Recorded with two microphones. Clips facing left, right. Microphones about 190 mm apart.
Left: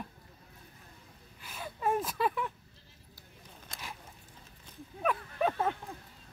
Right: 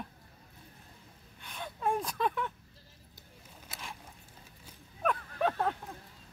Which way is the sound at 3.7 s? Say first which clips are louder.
Even; 5° right (ahead or behind).